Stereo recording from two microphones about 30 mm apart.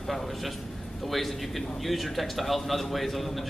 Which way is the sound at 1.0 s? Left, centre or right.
Centre.